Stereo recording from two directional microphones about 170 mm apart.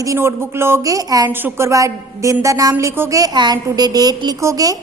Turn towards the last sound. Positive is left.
turn(degrees=-20)  # may be behind; listen again after turning